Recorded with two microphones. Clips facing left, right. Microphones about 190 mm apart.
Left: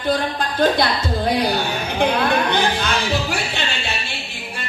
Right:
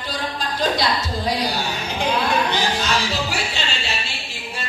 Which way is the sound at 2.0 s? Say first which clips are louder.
Left 3 dB; 55° left (ahead or behind).